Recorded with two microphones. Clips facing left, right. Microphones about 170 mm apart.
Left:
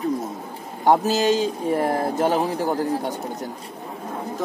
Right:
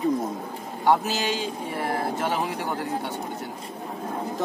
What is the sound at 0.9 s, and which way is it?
Speech, 40° left (ahead or behind).